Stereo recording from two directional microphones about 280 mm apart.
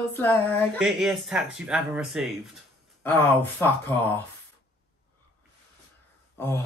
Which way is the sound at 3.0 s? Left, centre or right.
Centre.